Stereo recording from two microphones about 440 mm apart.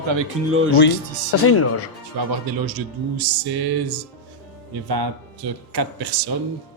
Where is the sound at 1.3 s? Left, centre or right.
Left.